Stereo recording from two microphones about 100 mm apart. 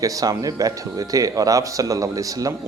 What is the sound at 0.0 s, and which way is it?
Speech, 35° right (ahead or behind).